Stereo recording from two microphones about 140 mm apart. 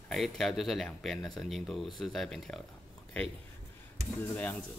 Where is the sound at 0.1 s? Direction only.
Centre (ahead or behind).